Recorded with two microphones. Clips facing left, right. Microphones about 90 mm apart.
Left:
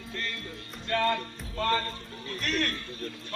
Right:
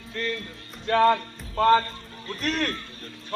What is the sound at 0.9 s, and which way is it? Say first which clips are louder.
Music: right 8 dB; 45° right (ahead or behind).